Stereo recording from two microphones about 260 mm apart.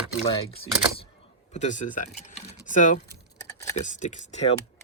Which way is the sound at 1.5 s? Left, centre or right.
Left.